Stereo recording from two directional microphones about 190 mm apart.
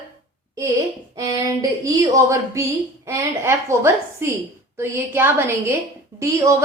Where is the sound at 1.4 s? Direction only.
15° right (ahead or behind).